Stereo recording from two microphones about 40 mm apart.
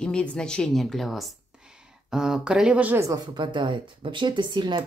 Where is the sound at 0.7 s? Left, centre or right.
Centre.